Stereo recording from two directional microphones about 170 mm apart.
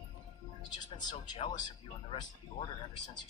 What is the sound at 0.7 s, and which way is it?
Speech, 25° left (ahead or behind).